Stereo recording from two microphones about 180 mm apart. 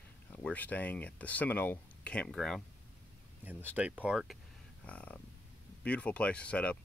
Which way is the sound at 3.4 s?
10° right (ahead or behind).